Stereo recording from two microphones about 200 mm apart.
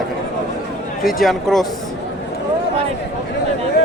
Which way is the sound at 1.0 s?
Centre (ahead or behind).